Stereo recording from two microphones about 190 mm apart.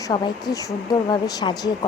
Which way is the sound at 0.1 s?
20° left (ahead or behind).